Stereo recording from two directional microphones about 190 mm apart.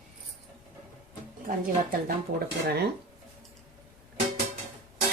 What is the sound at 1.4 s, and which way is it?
Speech, 50° right (ahead or behind).